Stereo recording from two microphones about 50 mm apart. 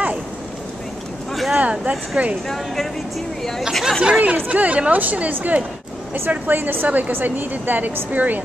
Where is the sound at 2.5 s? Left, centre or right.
Centre.